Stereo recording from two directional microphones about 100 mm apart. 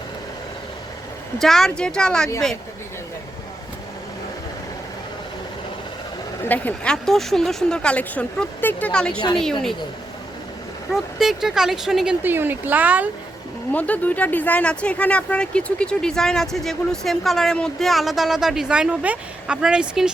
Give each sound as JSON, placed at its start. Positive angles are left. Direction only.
{"t": 1.4, "sound": "speech", "side_deg": 5}
{"t": 6.4, "sound": "speech", "side_deg": 20}
{"t": 6.9, "sound": "speech", "side_deg": 5}
{"t": 10.9, "sound": "speech", "side_deg": -5}
{"t": 12.2, "sound": "speech", "side_deg": -20}
{"t": 13.7, "sound": "speech", "side_deg": 15}